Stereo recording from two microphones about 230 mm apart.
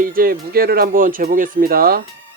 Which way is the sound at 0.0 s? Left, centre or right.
Right.